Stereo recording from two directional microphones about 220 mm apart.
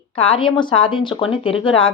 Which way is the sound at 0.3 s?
20° left (ahead or behind).